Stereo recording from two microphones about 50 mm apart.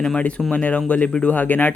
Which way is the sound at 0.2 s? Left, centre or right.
Left.